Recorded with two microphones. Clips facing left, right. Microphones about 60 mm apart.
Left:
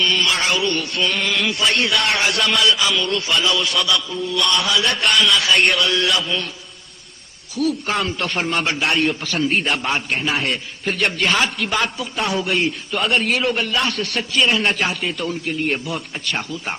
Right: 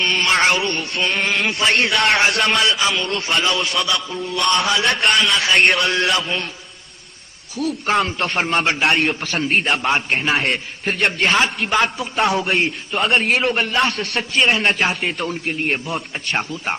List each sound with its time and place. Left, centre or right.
0.0 s a man's voice: right
7.9 s a man's voice: right